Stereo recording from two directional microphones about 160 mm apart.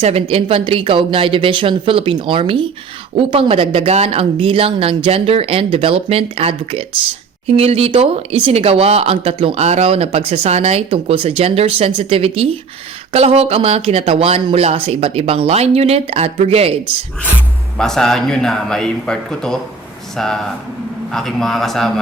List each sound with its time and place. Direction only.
0.0 s speech: 35° right (ahead or behind)
17.7 s a man's voice: 5° left (ahead or behind)